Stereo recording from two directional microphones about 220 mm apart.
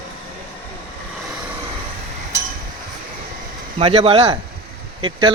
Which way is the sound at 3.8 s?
25° right (ahead or behind).